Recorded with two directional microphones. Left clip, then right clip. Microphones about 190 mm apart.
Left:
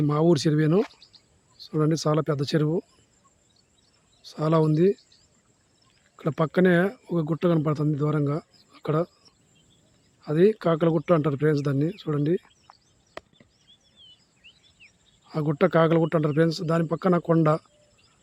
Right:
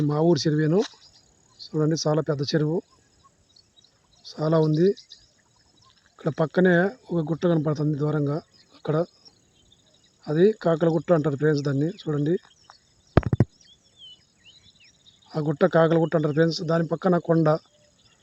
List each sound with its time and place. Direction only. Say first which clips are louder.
0.0 s speech: even; 10° left (ahead or behind)
4.3 s speech: right 1 dB; 5° left (ahead or behind)
6.1 s a man's voice: right 1 dB; centre (ahead or behind)
14.4 s cricket: left 4 dB; 75° left (ahead or behind)
15.3 s a man's voice: right 1 dB; 5° left (ahead or behind)